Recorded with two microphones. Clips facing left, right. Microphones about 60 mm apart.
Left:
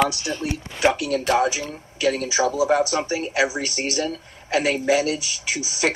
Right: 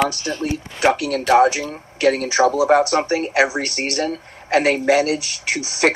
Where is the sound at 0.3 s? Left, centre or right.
Centre.